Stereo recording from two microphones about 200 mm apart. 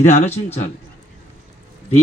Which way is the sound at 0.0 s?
35° left (ahead or behind).